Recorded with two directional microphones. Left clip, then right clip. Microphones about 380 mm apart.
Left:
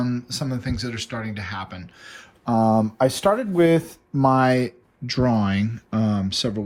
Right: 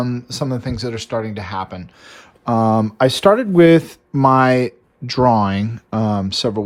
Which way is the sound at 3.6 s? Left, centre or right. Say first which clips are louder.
Right 7 dB; right.